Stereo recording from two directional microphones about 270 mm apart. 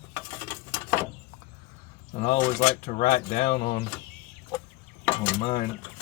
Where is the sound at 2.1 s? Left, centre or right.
Left.